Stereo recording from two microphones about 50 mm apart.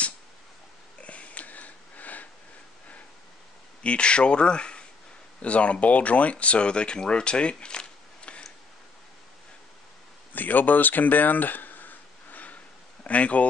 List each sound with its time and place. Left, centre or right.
1.0 s sniff: left
3.8 s speech: left
10.3 s a sound: left
13.0 s speech: left